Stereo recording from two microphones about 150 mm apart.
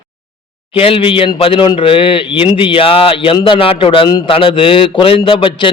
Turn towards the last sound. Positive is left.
turn(degrees=35)  # may be behind; listen again after turning